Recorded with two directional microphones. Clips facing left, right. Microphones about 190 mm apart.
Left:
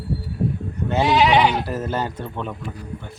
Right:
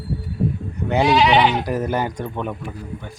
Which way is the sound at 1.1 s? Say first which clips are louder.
Even; 10° left (ahead or behind).